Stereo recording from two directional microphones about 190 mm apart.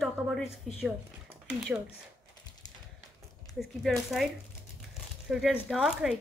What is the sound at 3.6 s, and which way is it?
Speech, centre (ahead or behind).